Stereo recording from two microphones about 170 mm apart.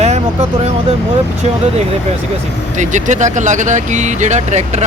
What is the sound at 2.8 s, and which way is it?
Speech, 45° right (ahead or behind).